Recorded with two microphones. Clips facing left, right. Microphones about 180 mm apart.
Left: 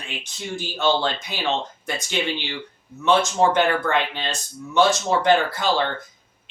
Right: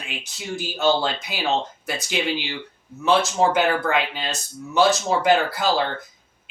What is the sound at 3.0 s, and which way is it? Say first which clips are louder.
Speech: left 1 dB; centre (ahead or behind).